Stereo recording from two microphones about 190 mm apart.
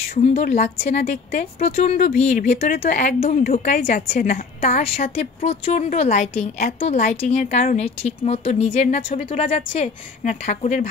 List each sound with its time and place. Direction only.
0.1 s a woman's voice: 40° left (ahead or behind)